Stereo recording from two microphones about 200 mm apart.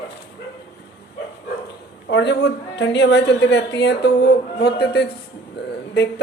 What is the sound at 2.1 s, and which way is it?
A woman's voice, 60° left (ahead or behind).